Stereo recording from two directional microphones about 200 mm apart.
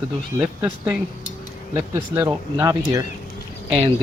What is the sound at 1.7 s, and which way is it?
Speech, 15° right (ahead or behind).